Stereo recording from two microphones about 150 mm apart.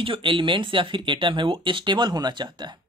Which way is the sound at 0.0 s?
35° right (ahead or behind).